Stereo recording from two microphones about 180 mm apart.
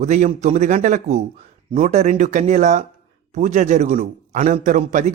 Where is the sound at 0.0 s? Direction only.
40° right (ahead or behind).